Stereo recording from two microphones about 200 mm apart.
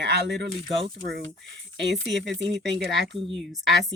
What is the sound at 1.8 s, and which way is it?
Speech, 60° right (ahead or behind).